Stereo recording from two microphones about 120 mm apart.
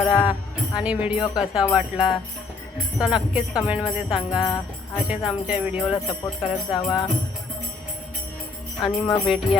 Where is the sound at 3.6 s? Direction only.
10° right (ahead or behind).